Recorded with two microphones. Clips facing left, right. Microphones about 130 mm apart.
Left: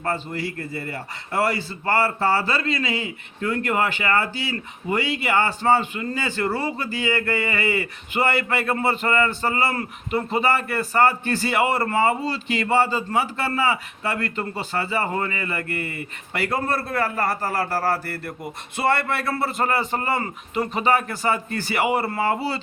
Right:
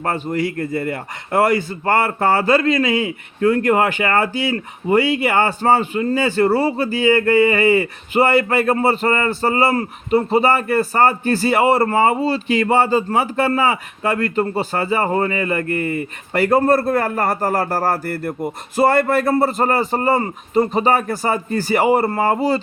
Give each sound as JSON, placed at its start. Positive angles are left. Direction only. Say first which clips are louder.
{"t": 0.0, "sound": "a man's voice", "louder": "right 6 dB", "side_deg": -50}